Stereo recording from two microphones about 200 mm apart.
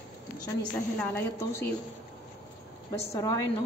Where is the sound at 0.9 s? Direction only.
10° left (ahead or behind).